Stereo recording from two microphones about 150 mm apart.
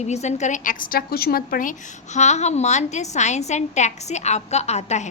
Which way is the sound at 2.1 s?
50° left (ahead or behind).